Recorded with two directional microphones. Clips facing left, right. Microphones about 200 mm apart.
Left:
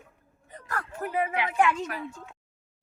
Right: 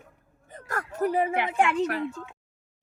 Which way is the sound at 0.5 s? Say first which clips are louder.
Right 3 dB; 45° right (ahead or behind).